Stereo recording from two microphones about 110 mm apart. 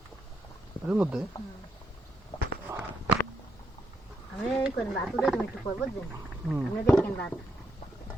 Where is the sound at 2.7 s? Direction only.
30° right (ahead or behind).